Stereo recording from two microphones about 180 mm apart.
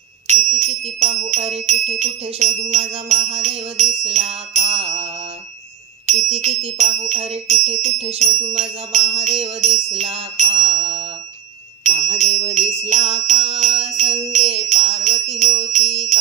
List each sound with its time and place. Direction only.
0.3 s jingle bell: 35° right (ahead or behind)
3.4 s music: 35° right (ahead or behind)
6.0 s jingle bell: 35° right (ahead or behind)
11.8 s jingle bell: 35° right (ahead or behind)